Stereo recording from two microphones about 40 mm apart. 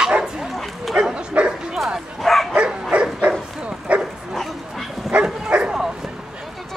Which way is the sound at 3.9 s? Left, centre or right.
Right.